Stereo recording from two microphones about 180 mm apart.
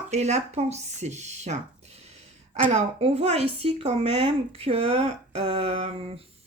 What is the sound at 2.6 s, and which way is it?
Speech, 35° right (ahead or behind).